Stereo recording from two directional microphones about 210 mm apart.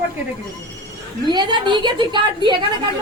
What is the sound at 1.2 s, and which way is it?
A woman's voice, 20° right (ahead or behind).